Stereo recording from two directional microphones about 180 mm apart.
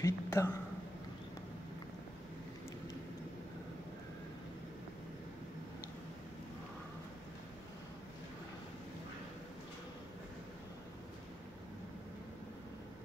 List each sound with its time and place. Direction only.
0.0 s speech: 15° left (ahead or behind)